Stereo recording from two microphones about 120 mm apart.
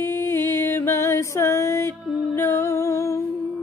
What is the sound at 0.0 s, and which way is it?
Music, 20° left (ahead or behind).